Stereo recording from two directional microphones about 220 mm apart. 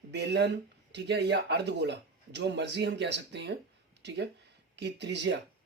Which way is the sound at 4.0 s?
50° right (ahead or behind).